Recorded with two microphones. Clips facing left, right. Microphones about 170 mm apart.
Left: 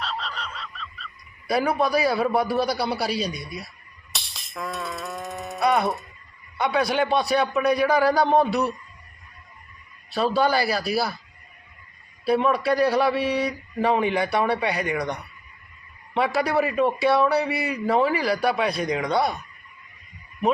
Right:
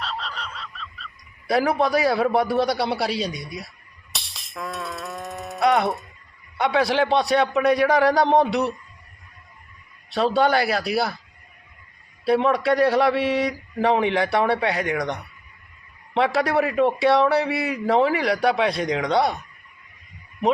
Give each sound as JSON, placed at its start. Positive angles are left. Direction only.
{"t": 0.0, "sound": "frog", "side_deg": 0}
{"t": 1.5, "sound": "a man's voice", "side_deg": -25}
{"t": 4.1, "sound": "music", "side_deg": 0}
{"t": 5.5, "sound": "music", "side_deg": -20}
{"t": 6.6, "sound": "a man's voice", "side_deg": -25}
{"t": 10.2, "sound": "a man's voice", "side_deg": -25}
{"t": 12.2, "sound": "a man's voice", "side_deg": -25}